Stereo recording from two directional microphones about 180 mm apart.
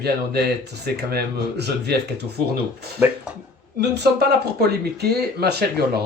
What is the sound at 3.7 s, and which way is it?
Speech, 65° right (ahead or behind).